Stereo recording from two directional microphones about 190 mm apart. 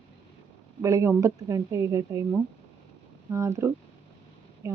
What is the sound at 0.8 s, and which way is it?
Speech, 15° right (ahead or behind).